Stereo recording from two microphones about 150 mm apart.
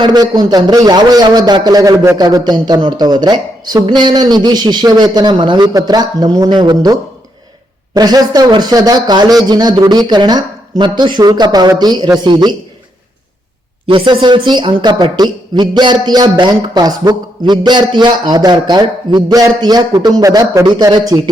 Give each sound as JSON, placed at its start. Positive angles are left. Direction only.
{"t": 0.0, "sound": "speech", "side_deg": -25}
{"t": 13.8, "sound": "speech", "side_deg": -35}